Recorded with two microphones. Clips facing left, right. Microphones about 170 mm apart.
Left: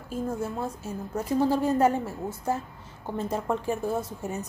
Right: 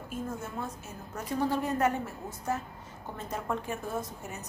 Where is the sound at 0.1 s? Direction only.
30° left (ahead or behind).